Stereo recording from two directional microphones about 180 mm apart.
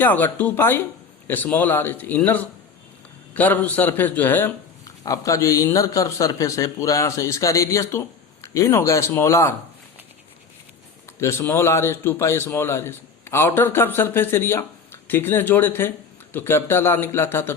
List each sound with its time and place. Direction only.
0.0 s a man's voice: 10° left (ahead or behind)
11.2 s a man's voice: 15° left (ahead or behind)